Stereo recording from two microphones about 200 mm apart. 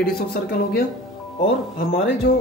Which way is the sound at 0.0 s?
50° left (ahead or behind).